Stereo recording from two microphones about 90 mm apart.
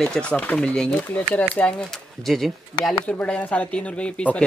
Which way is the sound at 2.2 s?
Centre (ahead or behind).